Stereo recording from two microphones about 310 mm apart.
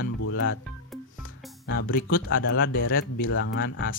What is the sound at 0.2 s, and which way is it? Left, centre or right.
Music, left.